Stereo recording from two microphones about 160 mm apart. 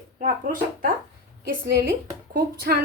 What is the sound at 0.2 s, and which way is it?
Speech, 60° right (ahead or behind).